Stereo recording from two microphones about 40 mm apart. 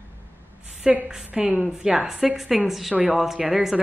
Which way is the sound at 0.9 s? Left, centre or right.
Right.